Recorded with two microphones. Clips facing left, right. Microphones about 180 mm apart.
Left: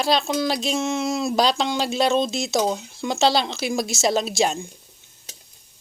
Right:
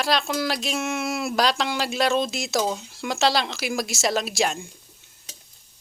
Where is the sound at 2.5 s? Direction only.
20° left (ahead or behind).